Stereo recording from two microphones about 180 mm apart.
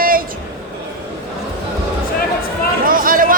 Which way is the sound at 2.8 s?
50° right (ahead or behind).